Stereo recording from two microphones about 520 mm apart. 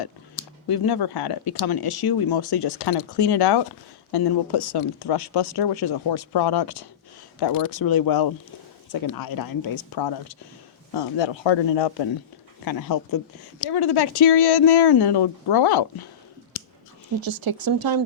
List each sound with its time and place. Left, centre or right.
0.7 s speech: left
12.6 s speech: left
17.2 s speech: right